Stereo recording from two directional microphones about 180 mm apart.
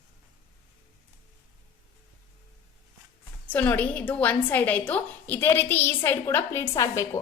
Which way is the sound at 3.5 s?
10° left (ahead or behind).